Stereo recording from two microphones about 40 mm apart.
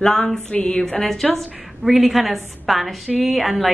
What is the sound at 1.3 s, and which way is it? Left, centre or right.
A woman's voice, centre.